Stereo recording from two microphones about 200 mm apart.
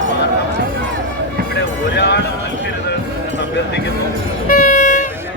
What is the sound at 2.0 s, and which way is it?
Clip-clop, 60° left (ahead or behind).